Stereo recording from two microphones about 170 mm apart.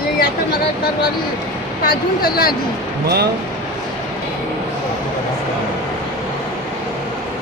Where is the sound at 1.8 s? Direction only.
60° left (ahead or behind).